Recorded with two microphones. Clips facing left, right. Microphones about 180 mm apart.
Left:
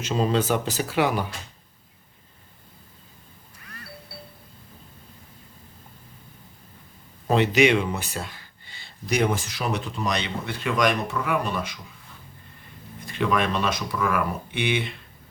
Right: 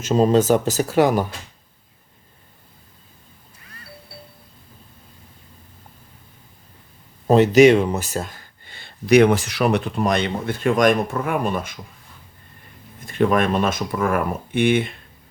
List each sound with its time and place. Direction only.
0.0 s speech: 45° right (ahead or behind)
7.3 s speech: 40° right (ahead or behind)
13.1 s speech: 50° right (ahead or behind)